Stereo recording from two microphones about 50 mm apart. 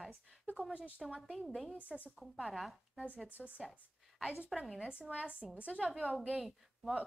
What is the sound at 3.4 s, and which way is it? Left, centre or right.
Speech, centre.